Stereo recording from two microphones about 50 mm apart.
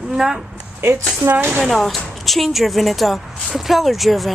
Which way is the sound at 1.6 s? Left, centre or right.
Centre.